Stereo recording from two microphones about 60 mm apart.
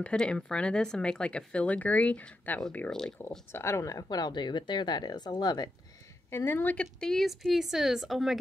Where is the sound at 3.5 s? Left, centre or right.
Left.